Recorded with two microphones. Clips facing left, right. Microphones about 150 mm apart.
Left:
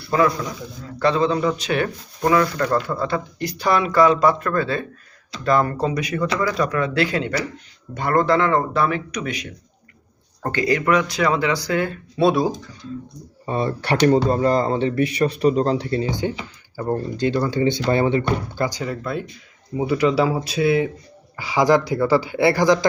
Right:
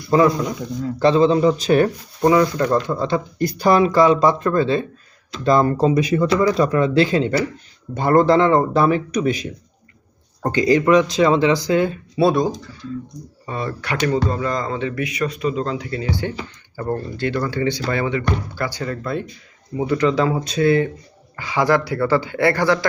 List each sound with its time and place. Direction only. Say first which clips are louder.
0.1 s speech: right 4 dB; 25° right (ahead or behind)
1.6 s speech: right 7 dB; 40° right (ahead or behind)
2.2 s speech: right 3 dB; 20° right (ahead or behind)
3.3 s speech: right 6 dB; 40° right (ahead or behind)
3.9 s speech: right 1 dB; 25° right (ahead or behind)
10.4 s speech: right 4 dB; 20° right (ahead or behind)
12.1 s speech: even; centre (ahead or behind)
13.4 s speech: left 4 dB; 25° left (ahead or behind)
16.7 s speech: left 1 dB; 15° left (ahead or behind)